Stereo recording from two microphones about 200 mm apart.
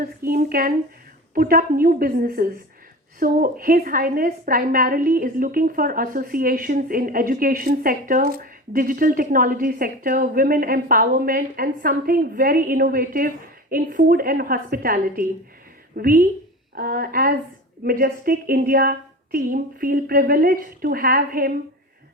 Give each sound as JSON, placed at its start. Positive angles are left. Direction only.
{"t": 0.0, "sound": "a woman's voice", "side_deg": -50}